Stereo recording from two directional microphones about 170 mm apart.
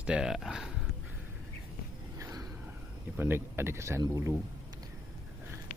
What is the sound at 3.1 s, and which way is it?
Speech, 15° right (ahead or behind).